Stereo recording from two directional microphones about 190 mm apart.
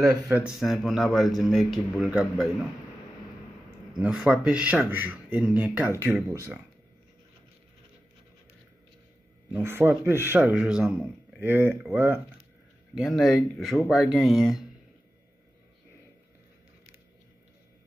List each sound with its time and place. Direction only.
0.0 s speech: 5° right (ahead or behind)
3.9 s speech: 5° right (ahead or behind)
9.5 s speech: 10° right (ahead or behind)
12.9 s speech: centre (ahead or behind)